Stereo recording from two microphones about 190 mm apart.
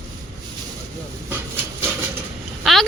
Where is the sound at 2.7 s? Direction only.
Centre (ahead or behind).